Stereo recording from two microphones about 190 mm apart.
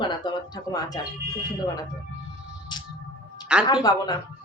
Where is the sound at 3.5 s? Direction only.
5° right (ahead or behind).